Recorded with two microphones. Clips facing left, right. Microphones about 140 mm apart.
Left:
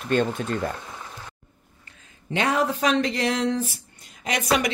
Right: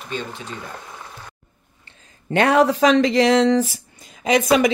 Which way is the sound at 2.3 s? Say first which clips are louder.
Right 7 dB; 65° right (ahead or behind).